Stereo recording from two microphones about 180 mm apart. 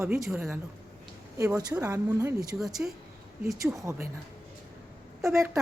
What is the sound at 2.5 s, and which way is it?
Speech, centre (ahead or behind).